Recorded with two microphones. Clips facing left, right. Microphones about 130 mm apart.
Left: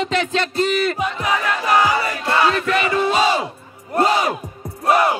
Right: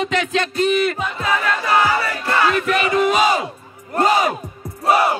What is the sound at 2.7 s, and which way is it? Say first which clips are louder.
Battle cry: right 1 dB; 30° left (ahead or behind).